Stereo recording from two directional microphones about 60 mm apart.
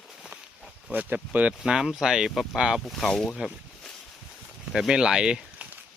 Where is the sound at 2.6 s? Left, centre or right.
Centre.